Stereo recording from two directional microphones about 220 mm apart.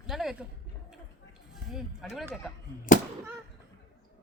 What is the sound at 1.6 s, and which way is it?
Speech, centre (ahead or behind).